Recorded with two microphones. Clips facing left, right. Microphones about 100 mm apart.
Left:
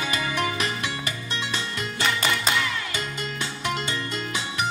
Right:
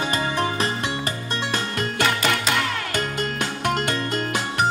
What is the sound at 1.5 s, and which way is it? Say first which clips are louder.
Music: right 5 dB; 50° right (ahead or behind).